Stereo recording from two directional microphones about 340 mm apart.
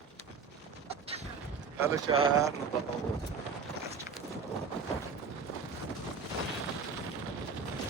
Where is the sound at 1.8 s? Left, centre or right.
Centre.